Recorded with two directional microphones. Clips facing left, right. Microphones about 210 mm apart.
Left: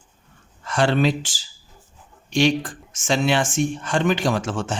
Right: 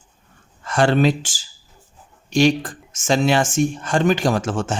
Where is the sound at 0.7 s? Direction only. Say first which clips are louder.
Right 3 dB; 45° right (ahead or behind).